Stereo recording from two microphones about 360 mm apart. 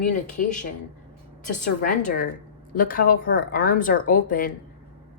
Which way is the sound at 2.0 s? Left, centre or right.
Left.